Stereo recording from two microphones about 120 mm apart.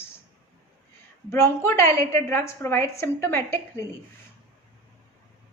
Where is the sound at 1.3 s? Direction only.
20° left (ahead or behind).